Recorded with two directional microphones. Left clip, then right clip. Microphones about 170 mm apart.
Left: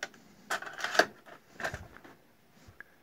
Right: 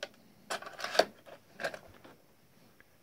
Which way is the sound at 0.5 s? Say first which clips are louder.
Left 4 dB; 20° right (ahead or behind).